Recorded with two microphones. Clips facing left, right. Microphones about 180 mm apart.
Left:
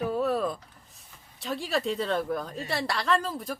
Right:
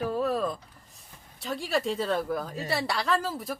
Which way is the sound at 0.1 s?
Centre (ahead or behind).